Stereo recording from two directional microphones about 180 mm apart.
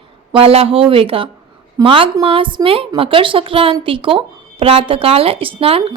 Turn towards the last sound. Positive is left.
turn(degrees=-30)  # may be behind; listen again after turning